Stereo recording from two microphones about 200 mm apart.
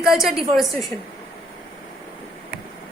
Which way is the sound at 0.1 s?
Centre (ahead or behind).